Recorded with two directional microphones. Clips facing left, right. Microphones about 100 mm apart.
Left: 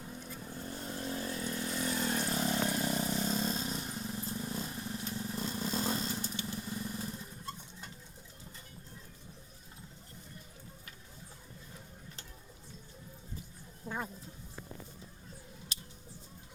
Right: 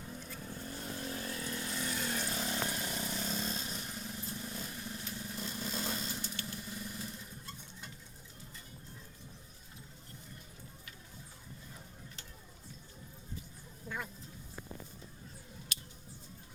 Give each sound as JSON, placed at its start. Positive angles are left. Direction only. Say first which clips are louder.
{"t": 0.0, "sound": "vehicle", "louder": "left 1 dB", "side_deg": 10}
{"t": 0.5, "sound": "vehicle", "louder": "left 2 dB", "side_deg": 25}
{"t": 13.8, "sound": "a sound", "louder": "left 3 dB", "side_deg": 35}